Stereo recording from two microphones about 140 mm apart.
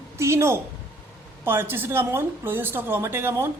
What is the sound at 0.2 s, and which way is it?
A woman's voice, 20° right (ahead or behind).